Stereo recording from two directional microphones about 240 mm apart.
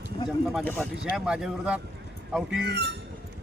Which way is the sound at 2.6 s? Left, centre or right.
Right.